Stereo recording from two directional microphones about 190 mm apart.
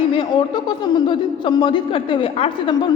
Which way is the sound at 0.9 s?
25° left (ahead or behind).